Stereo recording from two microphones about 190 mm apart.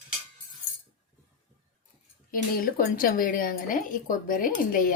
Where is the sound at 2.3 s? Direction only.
50° left (ahead or behind).